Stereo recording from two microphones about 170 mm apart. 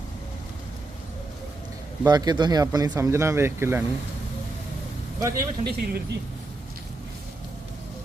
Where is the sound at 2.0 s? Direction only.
25° right (ahead or behind).